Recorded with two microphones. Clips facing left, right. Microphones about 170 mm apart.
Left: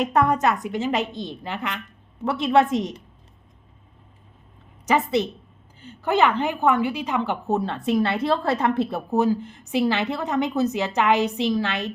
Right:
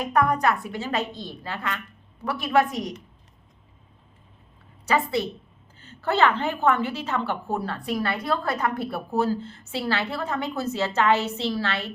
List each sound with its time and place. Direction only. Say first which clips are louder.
0.0 s a woman's voice: left 2 dB; 25° left (ahead or behind)
4.9 s a woman's voice: left 3 dB; 20° left (ahead or behind)